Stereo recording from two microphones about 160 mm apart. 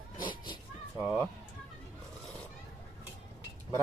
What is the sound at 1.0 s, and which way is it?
Music, 10° right (ahead or behind).